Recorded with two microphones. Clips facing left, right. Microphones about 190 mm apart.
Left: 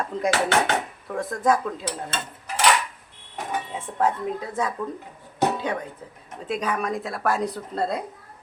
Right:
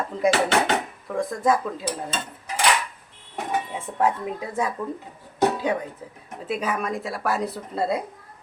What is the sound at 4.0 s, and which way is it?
Speech, 10° right (ahead or behind).